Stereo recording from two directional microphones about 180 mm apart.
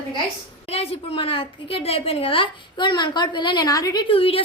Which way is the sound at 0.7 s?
35° left (ahead or behind).